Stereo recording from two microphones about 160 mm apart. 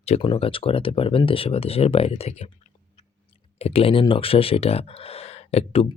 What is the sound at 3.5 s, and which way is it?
Speech, 35° left (ahead or behind).